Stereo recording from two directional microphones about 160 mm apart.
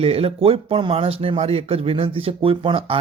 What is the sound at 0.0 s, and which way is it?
Speech, 40° right (ahead or behind).